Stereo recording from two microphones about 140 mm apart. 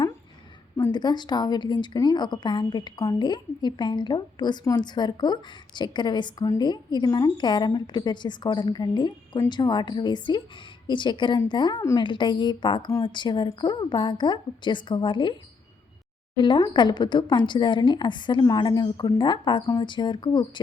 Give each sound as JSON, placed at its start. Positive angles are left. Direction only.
{"t": 0.8, "sound": "a woman's voice", "side_deg": 30}
{"t": 16.4, "sound": "a woman's voice", "side_deg": 35}
{"t": 19.6, "sound": "a woman's voice", "side_deg": 25}